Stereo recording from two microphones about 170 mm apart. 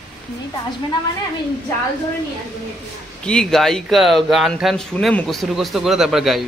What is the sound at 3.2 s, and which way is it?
Speech, 5° left (ahead or behind).